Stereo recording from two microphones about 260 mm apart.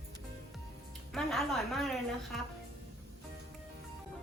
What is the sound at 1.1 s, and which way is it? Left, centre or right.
Speech, centre.